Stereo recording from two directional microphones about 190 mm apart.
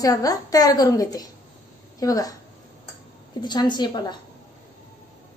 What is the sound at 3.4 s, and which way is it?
Speech, 25° left (ahead or behind).